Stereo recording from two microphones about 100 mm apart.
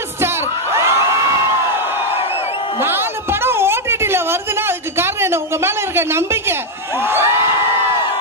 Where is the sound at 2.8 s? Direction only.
25° right (ahead or behind).